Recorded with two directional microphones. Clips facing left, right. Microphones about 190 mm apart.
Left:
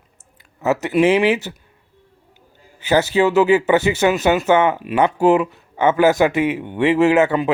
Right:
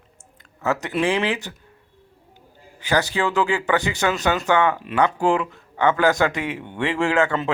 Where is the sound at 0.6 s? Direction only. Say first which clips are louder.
Left 6 dB; 20° left (ahead or behind).